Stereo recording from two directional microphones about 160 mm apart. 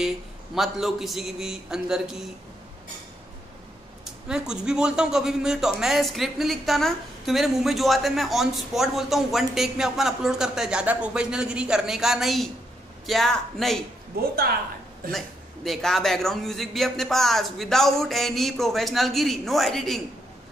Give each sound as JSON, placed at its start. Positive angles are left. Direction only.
{"t": 0.6, "sound": "a man's voice", "side_deg": 0}
{"t": 4.0, "sound": "a man's voice", "side_deg": -5}
{"t": 14.2, "sound": "a woman's voice", "side_deg": -75}
{"t": 15.0, "sound": "a man's voice", "side_deg": 0}